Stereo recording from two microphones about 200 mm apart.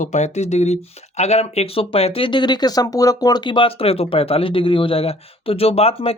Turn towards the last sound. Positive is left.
turn(degrees=30)  # may be behind; listen again after turning